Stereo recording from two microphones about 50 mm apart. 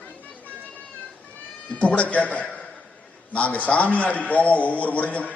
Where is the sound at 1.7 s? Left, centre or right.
Left.